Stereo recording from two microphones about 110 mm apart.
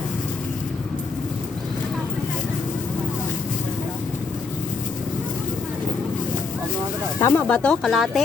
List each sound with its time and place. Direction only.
7.2 s speech: 20° left (ahead or behind)
7.4 s speech: 10° left (ahead or behind)